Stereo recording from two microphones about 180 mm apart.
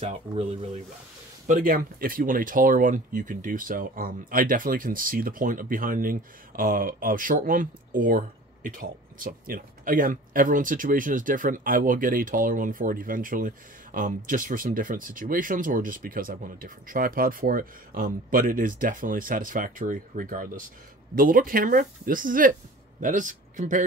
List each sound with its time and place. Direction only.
0.0 s speech: 35° right (ahead or behind)
1.5 s speech: 50° right (ahead or behind)